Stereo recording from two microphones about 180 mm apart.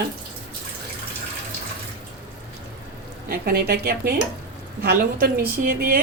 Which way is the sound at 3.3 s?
60° right (ahead or behind).